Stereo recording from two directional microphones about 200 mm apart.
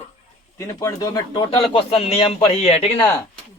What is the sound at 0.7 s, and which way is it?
A man's voice, 15° left (ahead or behind).